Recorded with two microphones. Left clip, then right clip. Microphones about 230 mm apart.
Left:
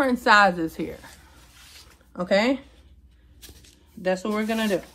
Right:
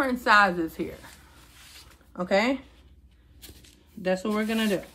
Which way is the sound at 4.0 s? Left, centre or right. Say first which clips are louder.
Left 2 dB; left.